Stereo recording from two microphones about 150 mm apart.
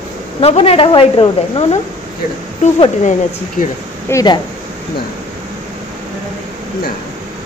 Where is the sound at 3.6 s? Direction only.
60° left (ahead or behind).